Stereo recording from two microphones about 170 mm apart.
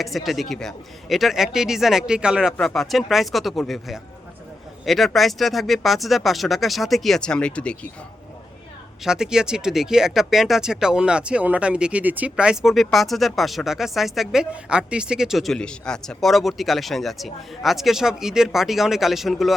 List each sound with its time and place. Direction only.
0.0 s speech: centre (ahead or behind)
9.0 s speech: 5° right (ahead or behind)